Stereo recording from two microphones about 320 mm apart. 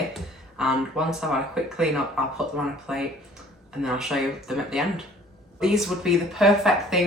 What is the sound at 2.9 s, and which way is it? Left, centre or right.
Speech, centre.